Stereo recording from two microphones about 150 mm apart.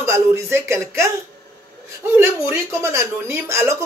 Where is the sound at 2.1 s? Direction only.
15° right (ahead or behind).